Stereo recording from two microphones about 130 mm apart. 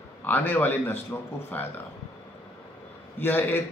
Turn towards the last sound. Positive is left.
turn(degrees=15)  # may be behind; listen again after turning